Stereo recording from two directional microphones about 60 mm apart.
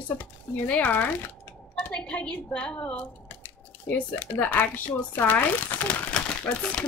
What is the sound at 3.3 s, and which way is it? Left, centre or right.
Speech, left.